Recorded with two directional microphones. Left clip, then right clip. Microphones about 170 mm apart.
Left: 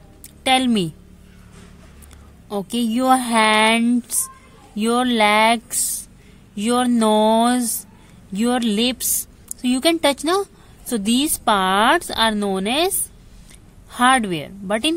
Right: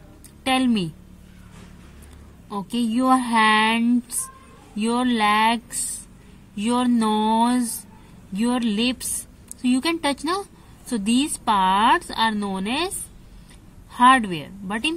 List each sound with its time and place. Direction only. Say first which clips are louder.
0.4 s a woman's voice: left 4 dB; 45° left (ahead or behind)
2.5 s a woman's voice: left 3 dB; 45° left (ahead or behind)
13.9 s a woman's voice: right 1 dB; 45° left (ahead or behind)